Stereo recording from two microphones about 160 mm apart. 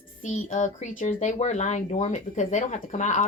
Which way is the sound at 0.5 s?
45° left (ahead or behind).